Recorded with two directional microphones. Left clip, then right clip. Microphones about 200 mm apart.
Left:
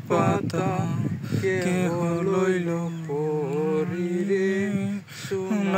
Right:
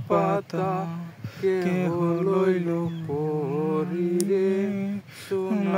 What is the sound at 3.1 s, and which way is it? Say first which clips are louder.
Mantra: left 1 dB; 50° right (ahead or behind).